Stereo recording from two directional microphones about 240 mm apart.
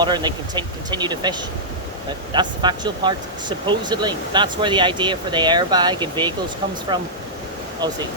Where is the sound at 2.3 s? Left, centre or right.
Centre.